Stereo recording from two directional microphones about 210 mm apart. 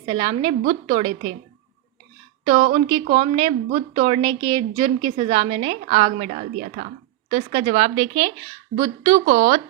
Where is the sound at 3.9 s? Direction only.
40° right (ahead or behind).